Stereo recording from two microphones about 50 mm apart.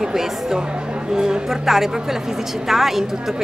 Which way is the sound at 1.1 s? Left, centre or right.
Centre.